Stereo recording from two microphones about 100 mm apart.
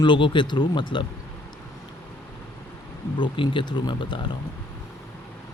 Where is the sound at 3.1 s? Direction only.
55° left (ahead or behind).